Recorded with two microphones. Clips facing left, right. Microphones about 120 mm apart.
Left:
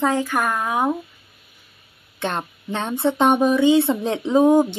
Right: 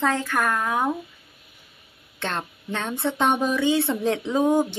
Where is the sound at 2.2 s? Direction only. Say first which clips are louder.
Left 4 dB; 15° left (ahead or behind).